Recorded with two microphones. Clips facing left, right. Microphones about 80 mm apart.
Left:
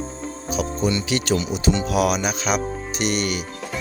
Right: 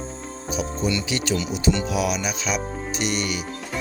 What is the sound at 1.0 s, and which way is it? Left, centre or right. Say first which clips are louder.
Speech: left 3 dB; left.